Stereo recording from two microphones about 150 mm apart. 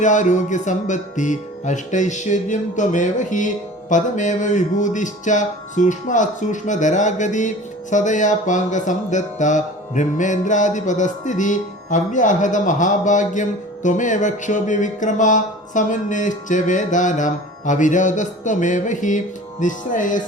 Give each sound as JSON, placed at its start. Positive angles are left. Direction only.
{"t": 0.0, "sound": "speech", "side_deg": 55}